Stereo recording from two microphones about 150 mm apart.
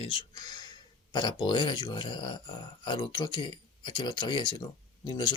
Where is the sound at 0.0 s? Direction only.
35° left (ahead or behind).